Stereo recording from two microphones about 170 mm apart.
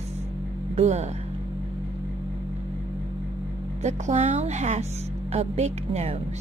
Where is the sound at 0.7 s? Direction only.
40° right (ahead or behind).